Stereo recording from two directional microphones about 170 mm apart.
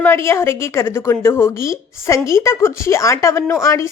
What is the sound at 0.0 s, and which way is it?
A woman's voice, 15° left (ahead or behind).